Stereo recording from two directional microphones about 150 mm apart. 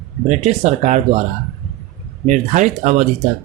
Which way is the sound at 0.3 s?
50° right (ahead or behind).